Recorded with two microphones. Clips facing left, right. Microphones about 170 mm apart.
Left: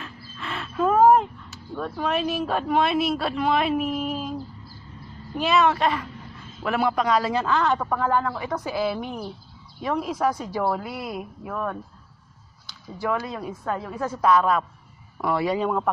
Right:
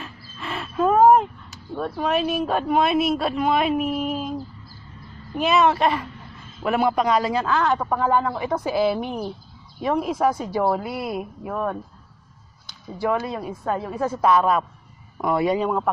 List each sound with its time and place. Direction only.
0.0 s a sound: 15° right (ahead or behind)
2.0 s a man's voice: 15° right (ahead or behind)
5.4 s a woman's voice: 20° right (ahead or behind)
11.4 s a woman's voice: 25° right (ahead or behind)
13.0 s a woman's voice: 20° right (ahead or behind)